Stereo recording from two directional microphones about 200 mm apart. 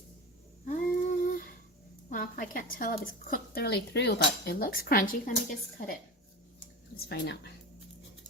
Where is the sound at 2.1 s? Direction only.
45° left (ahead or behind).